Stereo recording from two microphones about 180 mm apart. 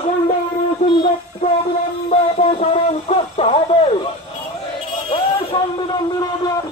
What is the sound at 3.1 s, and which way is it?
Speech, 35° left (ahead or behind).